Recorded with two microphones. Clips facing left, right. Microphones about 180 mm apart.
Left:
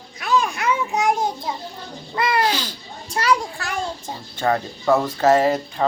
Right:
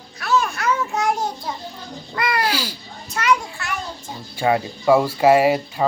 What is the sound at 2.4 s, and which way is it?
Speech, 10° right (ahead or behind).